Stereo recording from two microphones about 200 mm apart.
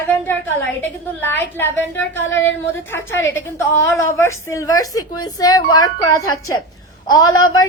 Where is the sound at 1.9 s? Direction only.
70° left (ahead or behind).